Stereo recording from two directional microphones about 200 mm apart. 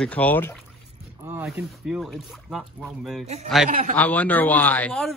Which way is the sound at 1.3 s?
10° right (ahead or behind).